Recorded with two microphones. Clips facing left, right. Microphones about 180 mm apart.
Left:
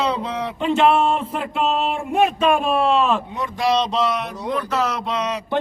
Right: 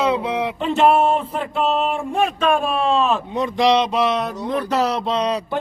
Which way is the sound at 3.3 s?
20° right (ahead or behind).